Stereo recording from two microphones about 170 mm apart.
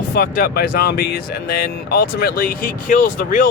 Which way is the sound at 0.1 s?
60° left (ahead or behind).